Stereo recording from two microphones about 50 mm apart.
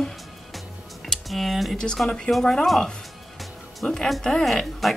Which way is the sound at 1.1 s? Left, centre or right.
Centre.